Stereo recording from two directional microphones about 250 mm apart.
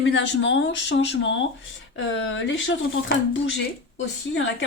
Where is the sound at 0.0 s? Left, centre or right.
Left.